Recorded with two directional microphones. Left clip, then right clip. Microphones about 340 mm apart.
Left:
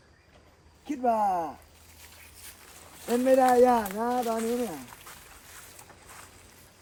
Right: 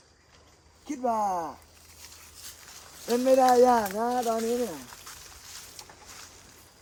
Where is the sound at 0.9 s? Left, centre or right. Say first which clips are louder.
Left 2 dB; centre.